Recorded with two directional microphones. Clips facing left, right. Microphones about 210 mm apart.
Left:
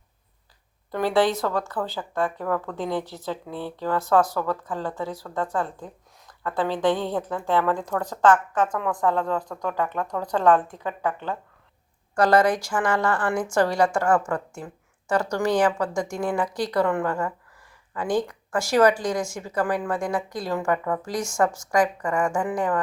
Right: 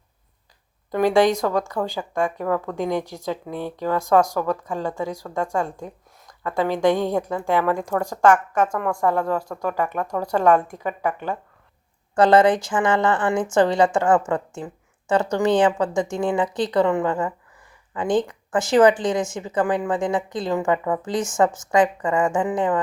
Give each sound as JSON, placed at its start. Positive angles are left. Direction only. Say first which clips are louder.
{"t": 0.9, "sound": "speech", "louder": "right 4 dB", "side_deg": -15}
{"t": 12.1, "sound": "a woman's voice", "louder": "right 4 dB", "side_deg": -25}